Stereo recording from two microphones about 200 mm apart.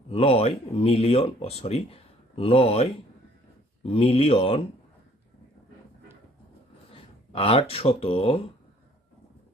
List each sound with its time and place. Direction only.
0.1 s speech: 30° left (ahead or behind)
6.9 s speech: 30° left (ahead or behind)